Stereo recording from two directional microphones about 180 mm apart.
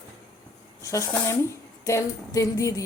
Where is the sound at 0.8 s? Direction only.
15° left (ahead or behind).